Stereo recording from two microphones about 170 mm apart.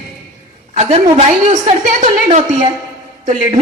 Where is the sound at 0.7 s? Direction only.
40° right (ahead or behind).